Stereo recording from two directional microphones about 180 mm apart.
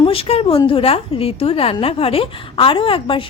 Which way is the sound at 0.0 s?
30° left (ahead or behind).